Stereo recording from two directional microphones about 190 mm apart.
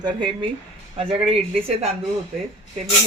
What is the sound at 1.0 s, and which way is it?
Speech, 30° right (ahead or behind).